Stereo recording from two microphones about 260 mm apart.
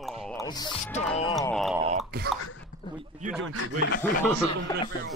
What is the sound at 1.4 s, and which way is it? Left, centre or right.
Speech, centre.